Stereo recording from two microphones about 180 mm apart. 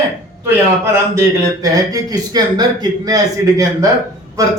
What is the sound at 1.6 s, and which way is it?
A man's voice, 20° right (ahead or behind).